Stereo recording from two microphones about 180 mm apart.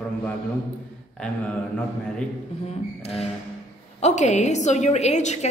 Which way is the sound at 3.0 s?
35° left (ahead or behind).